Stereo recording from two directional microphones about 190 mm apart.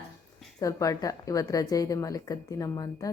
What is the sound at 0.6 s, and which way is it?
A woman's voice, 20° left (ahead or behind).